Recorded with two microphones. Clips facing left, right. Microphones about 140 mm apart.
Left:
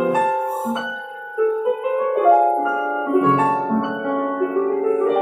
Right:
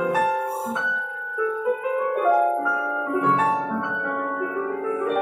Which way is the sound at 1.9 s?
20° left (ahead or behind).